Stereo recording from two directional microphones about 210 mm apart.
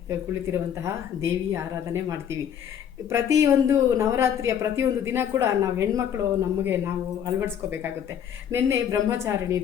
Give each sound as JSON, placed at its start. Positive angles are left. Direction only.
{"t": 0.1, "sound": "speech", "side_deg": -15}